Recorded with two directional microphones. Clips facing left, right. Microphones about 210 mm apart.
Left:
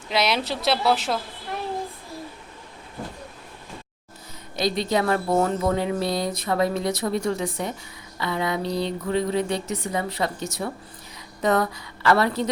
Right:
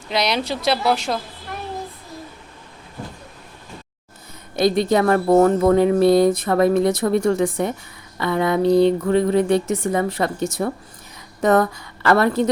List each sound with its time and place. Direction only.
0.1 s a woman's voice: 5° left (ahead or behind)
4.5 s speech: 50° right (ahead or behind)